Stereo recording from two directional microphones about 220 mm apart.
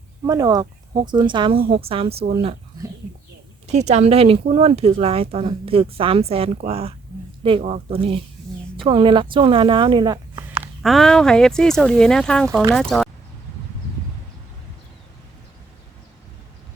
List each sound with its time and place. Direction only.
0.3 s speech: 15° right (ahead or behind)
10.8 s speech: centre (ahead or behind)